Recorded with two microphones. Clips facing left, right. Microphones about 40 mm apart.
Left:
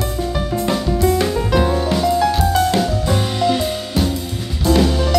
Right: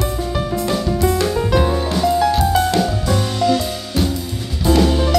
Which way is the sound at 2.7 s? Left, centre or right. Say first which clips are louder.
Even; centre.